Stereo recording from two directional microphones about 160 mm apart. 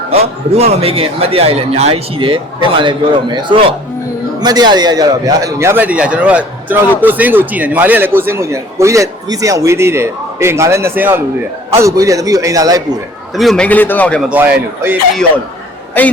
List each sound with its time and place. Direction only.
0.1 s a man's voice: 40° right (ahead or behind); by 13.0 s 25° right (ahead or behind)
13.3 s a man's voice: centre (ahead or behind)
14.3 s a man's voice: 10° right (ahead or behind)
16.0 s a man's voice: 10° left (ahead or behind)